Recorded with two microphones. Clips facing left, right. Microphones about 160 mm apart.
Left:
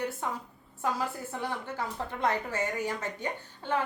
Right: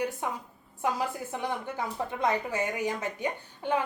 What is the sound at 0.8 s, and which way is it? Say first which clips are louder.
A woman's voice: right 2 dB; 15° right (ahead or behind).